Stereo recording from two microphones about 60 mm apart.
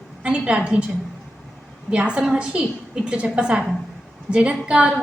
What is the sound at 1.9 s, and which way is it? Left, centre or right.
A woman's voice, centre.